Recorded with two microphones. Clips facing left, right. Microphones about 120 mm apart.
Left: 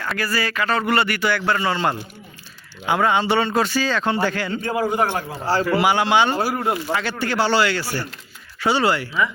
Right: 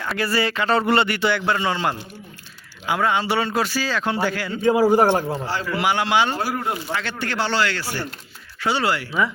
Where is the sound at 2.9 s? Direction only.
Centre (ahead or behind).